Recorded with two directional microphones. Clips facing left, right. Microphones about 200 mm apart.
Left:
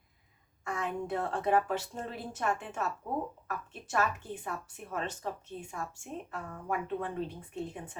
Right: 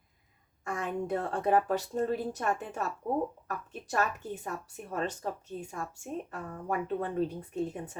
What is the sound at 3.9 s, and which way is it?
Speech, 40° right (ahead or behind).